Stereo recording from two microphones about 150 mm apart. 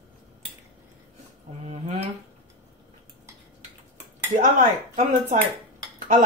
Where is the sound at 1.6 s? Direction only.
45° right (ahead or behind).